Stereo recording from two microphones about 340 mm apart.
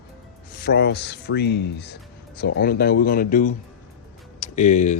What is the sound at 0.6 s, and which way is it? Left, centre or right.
Speech, left.